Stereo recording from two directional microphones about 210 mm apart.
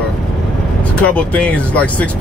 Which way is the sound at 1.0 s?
5° left (ahead or behind).